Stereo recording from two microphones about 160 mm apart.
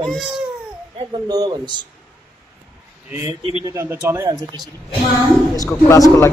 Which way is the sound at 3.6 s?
20° right (ahead or behind).